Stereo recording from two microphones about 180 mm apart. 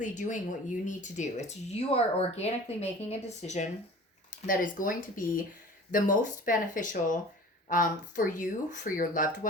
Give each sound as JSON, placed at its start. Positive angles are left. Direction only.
{"t": 0.0, "sound": "speech", "side_deg": 45}